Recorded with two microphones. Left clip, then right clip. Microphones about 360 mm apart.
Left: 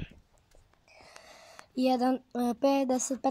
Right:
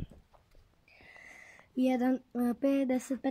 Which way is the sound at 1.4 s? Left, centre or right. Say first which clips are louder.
Left 2 dB; left.